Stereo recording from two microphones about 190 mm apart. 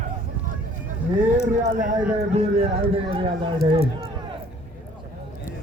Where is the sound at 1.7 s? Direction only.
45° right (ahead or behind).